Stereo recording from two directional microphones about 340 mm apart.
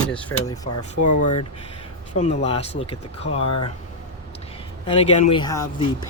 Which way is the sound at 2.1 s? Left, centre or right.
Centre.